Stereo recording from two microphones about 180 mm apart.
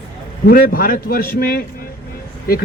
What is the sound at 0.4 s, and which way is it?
Speech, 55° left (ahead or behind).